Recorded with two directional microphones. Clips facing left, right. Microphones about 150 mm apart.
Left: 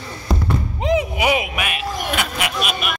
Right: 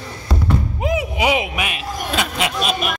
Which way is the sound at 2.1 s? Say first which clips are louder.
Right 5 dB; 25° right (ahead or behind).